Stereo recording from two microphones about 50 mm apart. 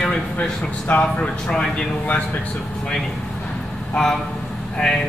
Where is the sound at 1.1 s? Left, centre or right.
Left.